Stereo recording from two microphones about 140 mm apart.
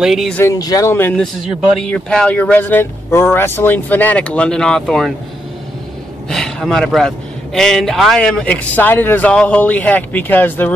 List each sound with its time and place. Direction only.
0.0 s a man's voice: centre (ahead or behind)
0.4 s speech: 25° left (ahead or behind)
1.1 s a man's voice: 5° left (ahead or behind)
6.2 s a man's voice: 5° left (ahead or behind)